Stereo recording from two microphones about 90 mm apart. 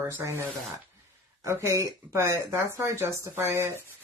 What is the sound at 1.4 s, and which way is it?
Speech, 35° right (ahead or behind).